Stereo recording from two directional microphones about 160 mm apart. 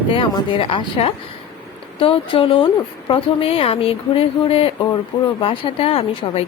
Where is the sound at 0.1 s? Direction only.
35° left (ahead or behind).